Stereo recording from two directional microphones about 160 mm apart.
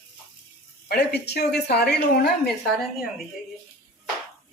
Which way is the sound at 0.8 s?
90° left.